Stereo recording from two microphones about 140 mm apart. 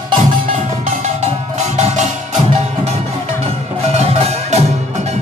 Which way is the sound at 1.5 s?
55° right (ahead or behind).